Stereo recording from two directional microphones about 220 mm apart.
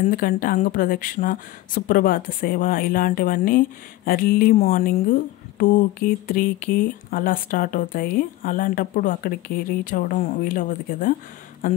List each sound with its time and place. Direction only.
0.0 s speech: 40° left (ahead or behind)